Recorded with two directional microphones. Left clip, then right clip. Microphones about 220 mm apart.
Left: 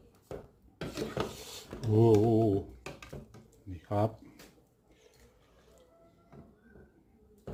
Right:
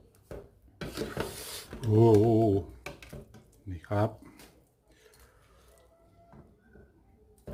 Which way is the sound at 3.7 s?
20° right (ahead or behind).